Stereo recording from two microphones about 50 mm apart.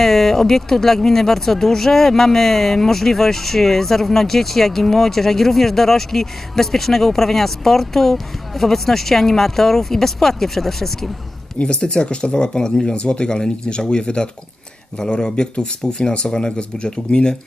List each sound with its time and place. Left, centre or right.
0.0 s speech: centre
11.6 s speech: centre